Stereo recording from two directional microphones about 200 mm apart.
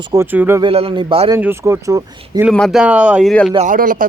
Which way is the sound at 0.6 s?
25° right (ahead or behind).